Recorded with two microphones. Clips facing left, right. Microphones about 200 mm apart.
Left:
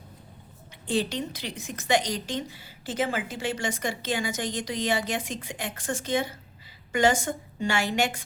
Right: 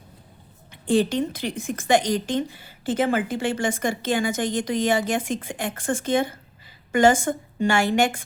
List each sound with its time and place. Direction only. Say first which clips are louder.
0.9 s a woman's voice: right 7 dB; 50° right (ahead or behind)